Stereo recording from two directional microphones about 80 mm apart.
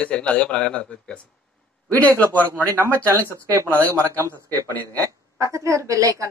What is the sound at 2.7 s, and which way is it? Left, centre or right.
Speech, right.